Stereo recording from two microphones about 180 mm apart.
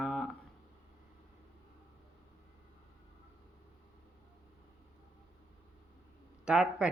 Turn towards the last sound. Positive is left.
turn(degrees=-5)  # may be behind; listen again after turning